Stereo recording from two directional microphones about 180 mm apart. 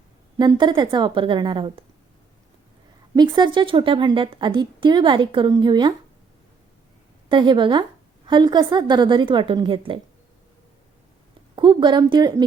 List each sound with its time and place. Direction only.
0.3 s a woman's voice: 25° right (ahead or behind)
3.2 s a woman's voice: 25° right (ahead or behind)
7.3 s a woman's voice: 25° right (ahead or behind)
11.5 s a woman's voice: 25° right (ahead or behind)